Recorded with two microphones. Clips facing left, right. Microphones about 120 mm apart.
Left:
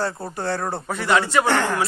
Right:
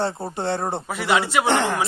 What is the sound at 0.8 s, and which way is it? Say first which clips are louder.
Speech: left 3 dB; 5° right (ahead or behind).